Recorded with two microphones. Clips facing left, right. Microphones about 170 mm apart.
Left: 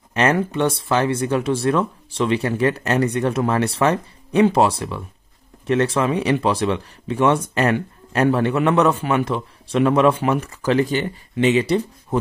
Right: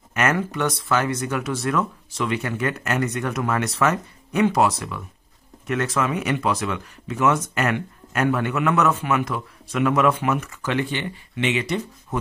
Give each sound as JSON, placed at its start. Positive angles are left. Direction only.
{"t": 0.1, "sound": "speech", "side_deg": 30}